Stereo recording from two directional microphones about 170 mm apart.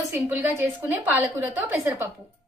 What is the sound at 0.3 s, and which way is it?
A woman's voice, 10° right (ahead or behind).